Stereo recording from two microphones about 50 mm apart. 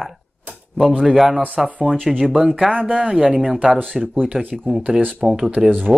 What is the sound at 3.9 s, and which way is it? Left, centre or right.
Speech, centre.